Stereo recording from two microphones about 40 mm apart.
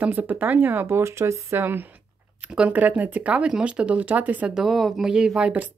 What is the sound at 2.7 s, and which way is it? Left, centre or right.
Speech, right.